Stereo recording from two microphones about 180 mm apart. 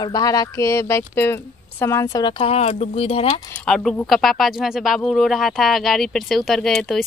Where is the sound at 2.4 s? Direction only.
35° left (ahead or behind).